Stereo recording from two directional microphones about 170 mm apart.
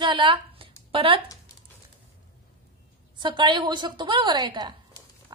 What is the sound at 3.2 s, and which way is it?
A woman's voice, 25° right (ahead or behind).